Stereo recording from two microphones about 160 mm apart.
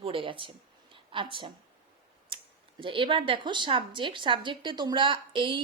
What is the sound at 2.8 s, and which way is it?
Speech, 30° right (ahead or behind).